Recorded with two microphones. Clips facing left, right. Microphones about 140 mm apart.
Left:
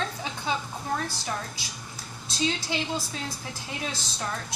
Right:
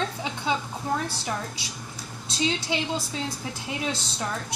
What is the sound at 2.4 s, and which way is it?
Speech, 20° right (ahead or behind).